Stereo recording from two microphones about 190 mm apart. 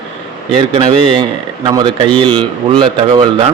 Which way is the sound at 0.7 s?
30° right (ahead or behind).